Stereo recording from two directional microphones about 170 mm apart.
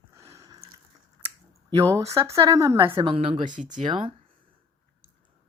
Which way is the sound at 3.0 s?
30° right (ahead or behind).